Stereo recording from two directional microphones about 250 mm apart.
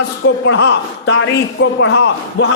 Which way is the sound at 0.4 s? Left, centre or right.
Left.